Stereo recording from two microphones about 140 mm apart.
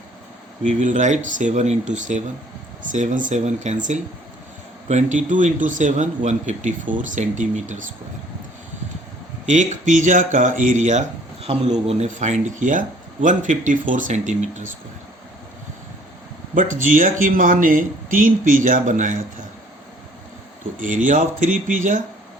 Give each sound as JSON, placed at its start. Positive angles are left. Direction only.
{"t": 0.6, "sound": "speech", "side_deg": -60}
{"t": 9.5, "sound": "speech", "side_deg": -60}
{"t": 11.4, "sound": "speech", "side_deg": -50}
{"t": 16.6, "sound": "speech", "side_deg": -70}
{"t": 20.7, "sound": "speech", "side_deg": -65}